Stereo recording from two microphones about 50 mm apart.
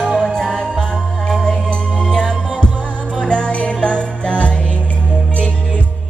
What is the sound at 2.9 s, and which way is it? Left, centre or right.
Music, right.